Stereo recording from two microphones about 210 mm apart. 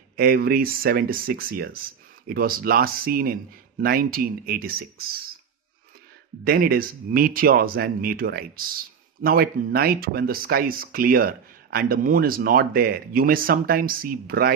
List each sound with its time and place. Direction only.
0.2 s speech: 45° right (ahead or behind)
6.4 s speech: 45° right (ahead or behind)